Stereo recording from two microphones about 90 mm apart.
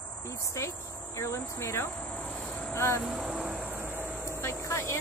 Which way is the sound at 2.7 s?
30° left (ahead or behind).